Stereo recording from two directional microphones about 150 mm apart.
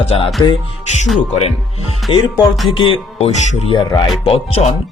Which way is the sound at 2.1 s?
35° left (ahead or behind).